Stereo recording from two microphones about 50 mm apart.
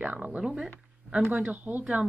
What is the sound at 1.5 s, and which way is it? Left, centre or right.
Speech, right.